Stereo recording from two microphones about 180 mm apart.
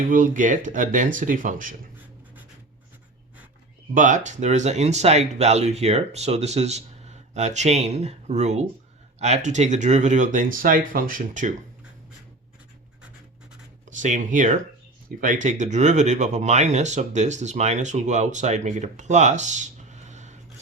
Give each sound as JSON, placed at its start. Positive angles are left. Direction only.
{"t": 0.1, "sound": "speech", "side_deg": -45}
{"t": 3.9, "sound": "speech", "side_deg": -45}
{"t": 13.9, "sound": "speech", "side_deg": -45}